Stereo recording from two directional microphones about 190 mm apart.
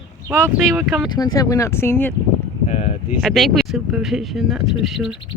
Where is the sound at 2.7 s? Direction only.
40° left (ahead or behind).